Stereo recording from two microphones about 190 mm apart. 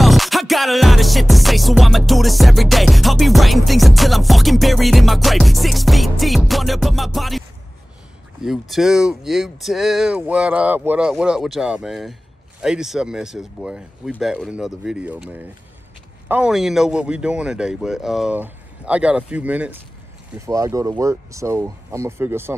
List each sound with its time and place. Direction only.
0.0 s music: centre (ahead or behind)
20.4 s speech: 15° right (ahead or behind)